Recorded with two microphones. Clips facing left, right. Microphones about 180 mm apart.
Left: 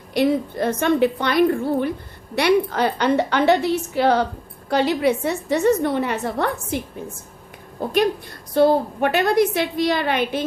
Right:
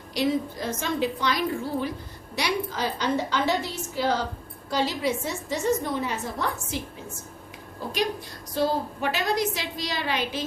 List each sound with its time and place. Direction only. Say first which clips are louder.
0.1 s a woman's voice: left 6 dB; 60° left (ahead or behind)